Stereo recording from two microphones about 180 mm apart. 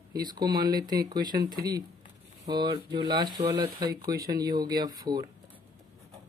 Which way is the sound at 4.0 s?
55° right (ahead or behind).